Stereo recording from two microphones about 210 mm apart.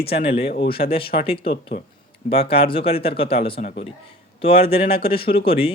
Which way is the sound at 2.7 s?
25° left (ahead or behind).